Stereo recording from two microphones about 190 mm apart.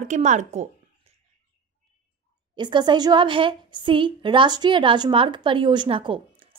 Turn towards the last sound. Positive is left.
turn(degrees=-30)  # may be behind; listen again after turning